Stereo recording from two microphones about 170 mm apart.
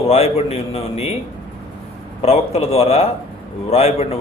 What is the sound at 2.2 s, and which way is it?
A man's voice, 40° left (ahead or behind).